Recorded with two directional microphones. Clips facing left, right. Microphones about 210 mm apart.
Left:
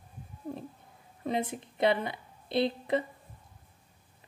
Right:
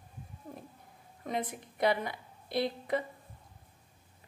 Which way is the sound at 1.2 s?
25° left (ahead or behind).